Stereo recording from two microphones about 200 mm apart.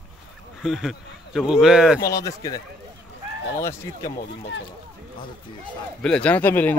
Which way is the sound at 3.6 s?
15° left (ahead or behind).